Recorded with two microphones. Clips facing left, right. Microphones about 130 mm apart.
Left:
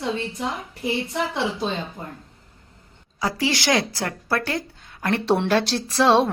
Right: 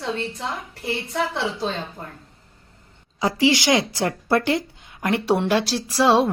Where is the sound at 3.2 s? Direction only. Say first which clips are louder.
Right 5 dB; 20° right (ahead or behind).